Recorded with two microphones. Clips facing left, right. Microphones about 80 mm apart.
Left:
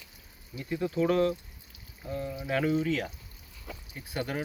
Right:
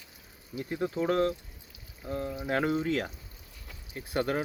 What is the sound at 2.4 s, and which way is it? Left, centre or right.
Speech, right.